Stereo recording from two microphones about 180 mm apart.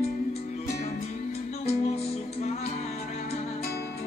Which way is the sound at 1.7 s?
35° left (ahead or behind).